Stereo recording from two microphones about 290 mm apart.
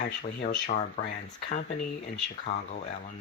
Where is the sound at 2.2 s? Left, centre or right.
Left.